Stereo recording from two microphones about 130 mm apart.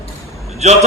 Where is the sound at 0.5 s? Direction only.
60° right (ahead or behind).